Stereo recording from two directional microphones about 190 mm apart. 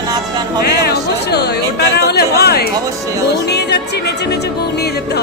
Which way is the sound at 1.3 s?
60° left (ahead or behind).